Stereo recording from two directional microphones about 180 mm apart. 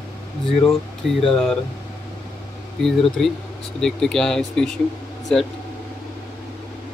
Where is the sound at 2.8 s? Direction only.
Centre (ahead or behind).